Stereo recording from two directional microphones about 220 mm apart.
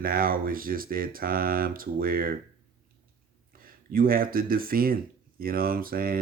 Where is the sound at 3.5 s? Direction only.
40° right (ahead or behind).